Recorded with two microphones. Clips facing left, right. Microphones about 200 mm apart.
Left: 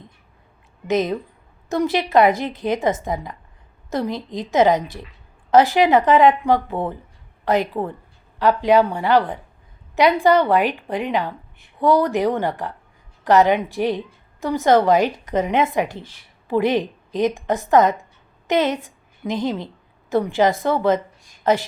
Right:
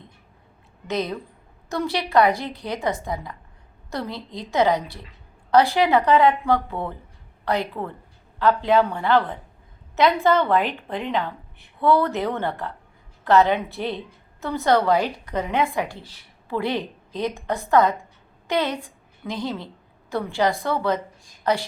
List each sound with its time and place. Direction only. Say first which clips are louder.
0.9 s a woman's voice: left 6 dB; 20° left (ahead or behind)